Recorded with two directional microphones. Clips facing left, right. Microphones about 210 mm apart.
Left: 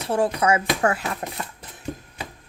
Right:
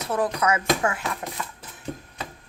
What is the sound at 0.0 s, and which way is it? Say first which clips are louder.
Speech: left 3 dB; 30° left (ahead or behind).